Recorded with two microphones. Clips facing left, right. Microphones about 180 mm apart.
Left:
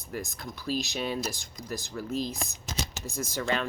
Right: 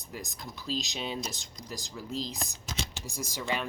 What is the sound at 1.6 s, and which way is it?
Speech, 15° right (ahead or behind).